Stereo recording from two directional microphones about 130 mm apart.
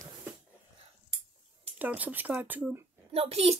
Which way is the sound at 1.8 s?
10° right (ahead or behind).